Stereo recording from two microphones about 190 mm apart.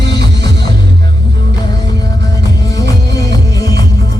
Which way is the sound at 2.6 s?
20° left (ahead or behind).